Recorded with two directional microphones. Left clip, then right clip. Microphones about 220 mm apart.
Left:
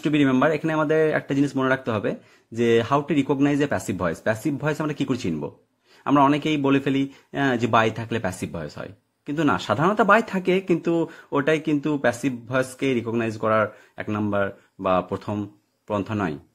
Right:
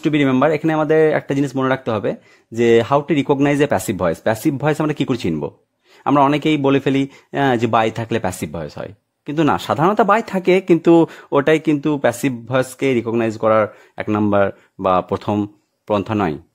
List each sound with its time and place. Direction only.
0.0 s a man's voice: 30° right (ahead or behind)